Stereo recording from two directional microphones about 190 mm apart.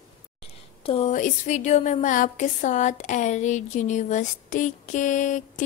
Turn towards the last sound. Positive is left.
turn(degrees=40)  # may be behind; listen again after turning